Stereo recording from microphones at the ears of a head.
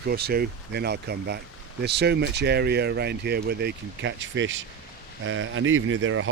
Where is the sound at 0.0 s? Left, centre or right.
Right.